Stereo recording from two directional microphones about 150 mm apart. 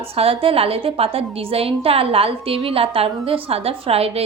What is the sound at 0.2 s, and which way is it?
A woman's voice, 40° right (ahead or behind).